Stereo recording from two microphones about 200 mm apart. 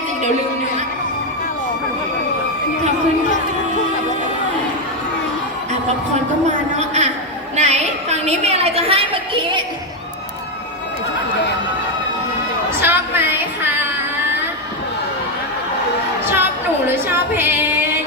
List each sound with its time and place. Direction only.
6.7 s a sound: 35° right (ahead or behind)
12.8 s music: 10° right (ahead or behind)
16.3 s singing: 10° right (ahead or behind)